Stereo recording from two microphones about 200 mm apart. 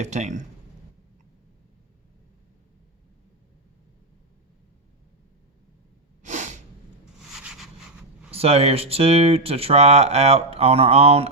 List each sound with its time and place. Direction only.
0.0 s speech: 35° right (ahead or behind)
6.2 s sneeze: 35° right (ahead or behind)
7.2 s a sound: 5° right (ahead or behind)
8.3 s speech: 30° right (ahead or behind)